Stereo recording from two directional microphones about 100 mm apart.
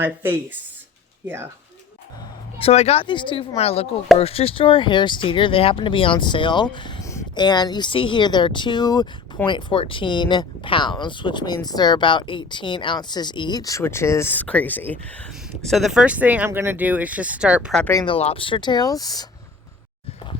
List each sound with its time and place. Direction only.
0.0 s speech: 20° right (ahead or behind)
2.6 s speech: 85° left
3.1 s speech: 55° left (ahead or behind); by 3.9 s 90° left
4.2 s speech: 75° left (ahead or behind); by 6.9 s 50° left (ahead or behind)
7.0 s a sound: 30° left (ahead or behind)
7.3 s speech: 45° left (ahead or behind)
13.8 s speech: 25° left (ahead or behind)
15.6 s speech: centre (ahead or behind)
18.2 s speech: 80° left; by 19.2 s 40° left (ahead or behind)